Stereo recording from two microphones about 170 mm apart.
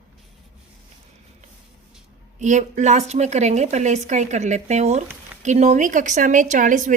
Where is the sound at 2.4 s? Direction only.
45° right (ahead or behind).